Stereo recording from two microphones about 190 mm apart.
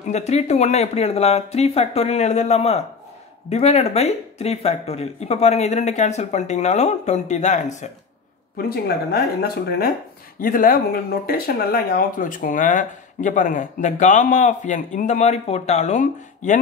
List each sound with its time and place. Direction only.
0.1 s speech: 35° left (ahead or behind)
8.5 s speech: 55° left (ahead or behind)